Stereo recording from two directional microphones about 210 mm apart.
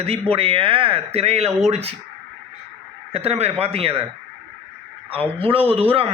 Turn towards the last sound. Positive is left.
turn(degrees=-25)  # may be behind; listen again after turning